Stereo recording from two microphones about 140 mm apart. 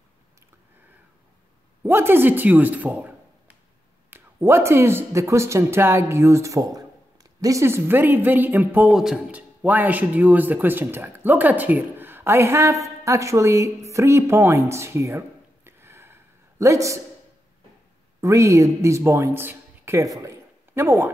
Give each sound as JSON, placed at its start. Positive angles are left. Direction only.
{"t": 1.8, "sound": "a woman's voice", "side_deg": -15}
{"t": 18.2, "sound": "a man's voice", "side_deg": -20}
{"t": 20.2, "sound": "a sound", "side_deg": -20}